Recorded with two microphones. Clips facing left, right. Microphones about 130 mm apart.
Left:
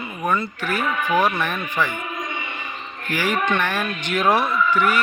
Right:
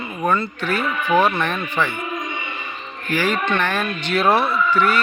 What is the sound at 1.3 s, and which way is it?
Speech, 10° left (ahead or behind).